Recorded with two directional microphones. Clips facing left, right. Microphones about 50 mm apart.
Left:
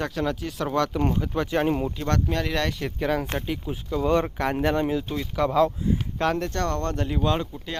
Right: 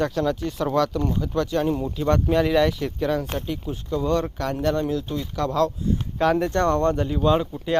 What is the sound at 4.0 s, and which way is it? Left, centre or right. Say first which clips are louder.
Speech: left 2 dB; left.